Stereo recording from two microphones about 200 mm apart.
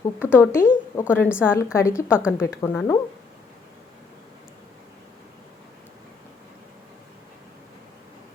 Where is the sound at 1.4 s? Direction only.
15° left (ahead or behind).